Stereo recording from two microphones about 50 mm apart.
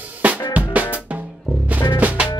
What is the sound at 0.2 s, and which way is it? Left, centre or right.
Drum kit, right.